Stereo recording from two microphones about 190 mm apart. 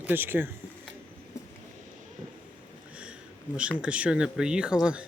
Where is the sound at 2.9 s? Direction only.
5° right (ahead or behind).